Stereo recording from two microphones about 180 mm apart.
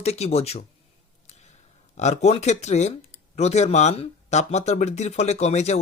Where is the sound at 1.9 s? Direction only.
40° left (ahead or behind).